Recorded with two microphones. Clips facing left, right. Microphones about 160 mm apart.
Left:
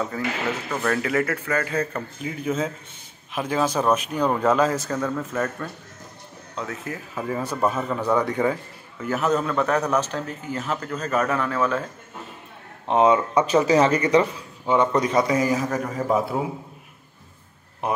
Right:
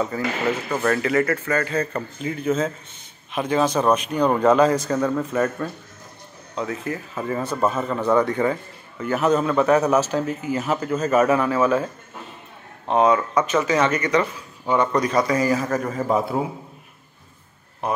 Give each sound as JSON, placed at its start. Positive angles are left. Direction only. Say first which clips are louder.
{"t": 0.1, "sound": "a man's voice", "louder": "right 3 dB", "side_deg": -5}
{"t": 4.9, "sound": "a man's voice", "louder": "right 4 dB", "side_deg": -5}
{"t": 12.8, "sound": "speech", "louder": "even", "side_deg": 20}
{"t": 14.2, "sound": "a man's voice", "louder": "left 1 dB", "side_deg": 15}
{"t": 17.8, "sound": "speech", "louder": "right 1 dB", "side_deg": 20}